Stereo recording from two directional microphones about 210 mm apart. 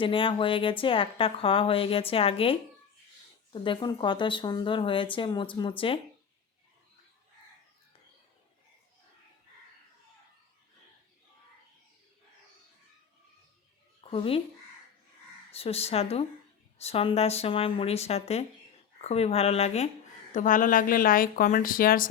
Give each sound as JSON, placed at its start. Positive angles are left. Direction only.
{"t": 0.0, "sound": "a woman's voice", "side_deg": 25}
{"t": 14.0, "sound": "speech", "side_deg": 25}
{"t": 15.5, "sound": "a woman's voice", "side_deg": 30}